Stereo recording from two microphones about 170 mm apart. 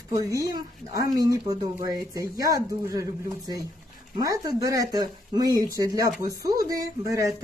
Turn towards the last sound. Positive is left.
turn(degrees=-20)  # may be behind; listen again after turning